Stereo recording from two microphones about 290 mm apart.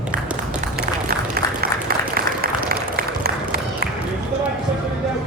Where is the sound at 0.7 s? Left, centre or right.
Right.